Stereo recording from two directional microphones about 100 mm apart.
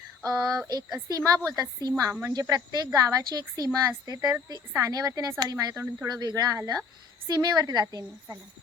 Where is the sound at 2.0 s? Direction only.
30° right (ahead or behind).